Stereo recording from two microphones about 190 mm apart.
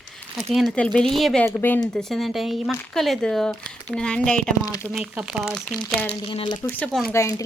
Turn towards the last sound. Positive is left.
turn(degrees=15)  # may be behind; listen again after turning